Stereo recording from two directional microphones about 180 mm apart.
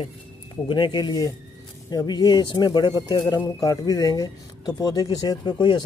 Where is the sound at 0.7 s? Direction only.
25° left (ahead or behind).